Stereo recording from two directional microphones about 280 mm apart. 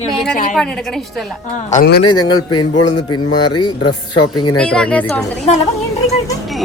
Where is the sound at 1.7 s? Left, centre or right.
Left.